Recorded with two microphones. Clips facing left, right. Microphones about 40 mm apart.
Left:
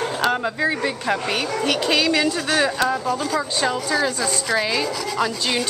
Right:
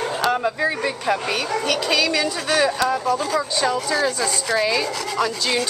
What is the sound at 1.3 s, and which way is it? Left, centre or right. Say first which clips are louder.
Speech: even; centre.